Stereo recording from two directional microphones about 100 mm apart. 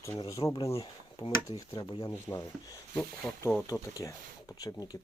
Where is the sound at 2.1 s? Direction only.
30° left (ahead or behind).